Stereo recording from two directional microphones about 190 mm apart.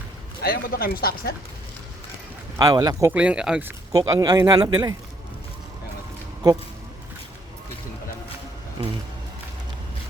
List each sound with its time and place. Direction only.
0.4 s speech: 55° left (ahead or behind)
2.6 s a man's voice: 20° right (ahead or behind)
3.1 s speech: 5° right (ahead or behind)
3.9 s a man's voice: 20° right (ahead or behind)
8.8 s music: 25° right (ahead or behind)